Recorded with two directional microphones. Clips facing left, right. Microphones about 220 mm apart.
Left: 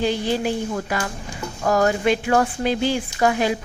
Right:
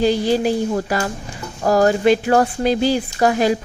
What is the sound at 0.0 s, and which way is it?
A woman's voice, 35° right (ahead or behind).